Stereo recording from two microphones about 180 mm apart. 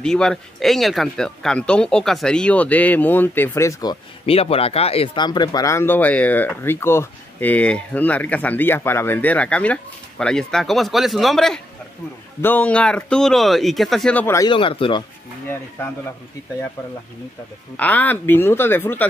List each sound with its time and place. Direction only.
0.0 s speech: 5° left (ahead or behind); by 4.4 s 25° left (ahead or behind)
4.4 s speech: 35° left (ahead or behind); by 14.5 s 15° left (ahead or behind)
14.5 s speech: 30° left (ahead or behind)
17.7 s speech: 10° left (ahead or behind)